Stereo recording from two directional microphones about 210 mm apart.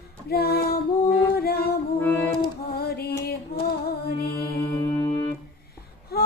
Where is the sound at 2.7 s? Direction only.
50° left (ahead or behind).